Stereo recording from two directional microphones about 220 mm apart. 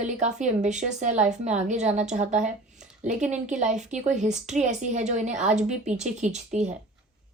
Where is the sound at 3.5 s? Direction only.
35° right (ahead or behind).